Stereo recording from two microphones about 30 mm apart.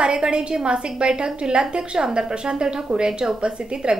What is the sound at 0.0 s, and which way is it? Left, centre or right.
A woman's voice, right.